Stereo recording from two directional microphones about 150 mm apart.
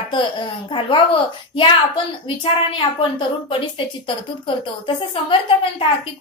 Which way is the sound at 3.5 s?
35° left (ahead or behind).